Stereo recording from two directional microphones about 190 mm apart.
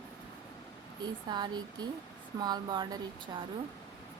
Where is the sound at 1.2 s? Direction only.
20° right (ahead or behind).